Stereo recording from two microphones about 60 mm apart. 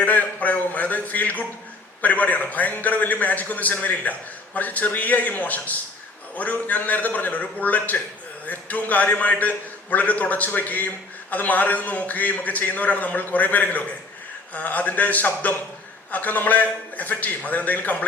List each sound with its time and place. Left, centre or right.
0.0 s a man's voice: left